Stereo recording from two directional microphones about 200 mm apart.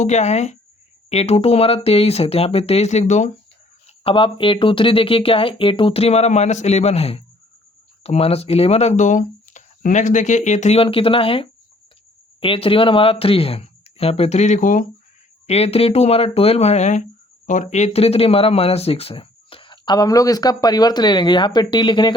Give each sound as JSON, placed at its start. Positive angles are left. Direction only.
{"t": 0.0, "sound": "speech", "side_deg": 35}
{"t": 15.4, "sound": "speech", "side_deg": 30}